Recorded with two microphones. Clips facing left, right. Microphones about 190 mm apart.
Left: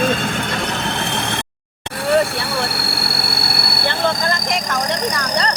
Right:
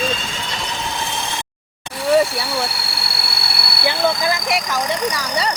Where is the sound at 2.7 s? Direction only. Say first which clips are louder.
Left 5 dB; 55° left (ahead or behind).